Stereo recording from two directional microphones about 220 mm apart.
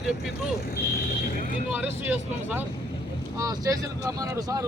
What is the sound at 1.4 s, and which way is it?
Speech, 35° left (ahead or behind).